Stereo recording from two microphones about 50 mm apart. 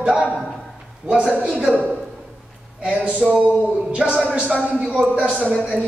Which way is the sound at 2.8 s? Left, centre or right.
Right.